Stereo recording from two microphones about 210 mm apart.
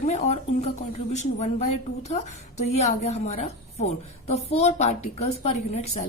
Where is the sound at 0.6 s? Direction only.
30° left (ahead or behind).